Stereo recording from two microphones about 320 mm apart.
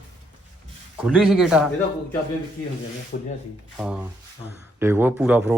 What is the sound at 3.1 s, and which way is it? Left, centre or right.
Speech, left.